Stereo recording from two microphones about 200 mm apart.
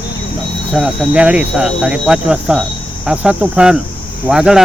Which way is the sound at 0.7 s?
Centre (ahead or behind).